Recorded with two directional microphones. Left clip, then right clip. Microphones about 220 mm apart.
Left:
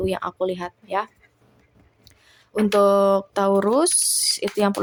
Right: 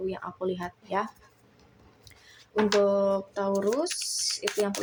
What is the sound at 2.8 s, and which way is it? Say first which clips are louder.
Speech: left 10 dB; 35° left (ahead or behind).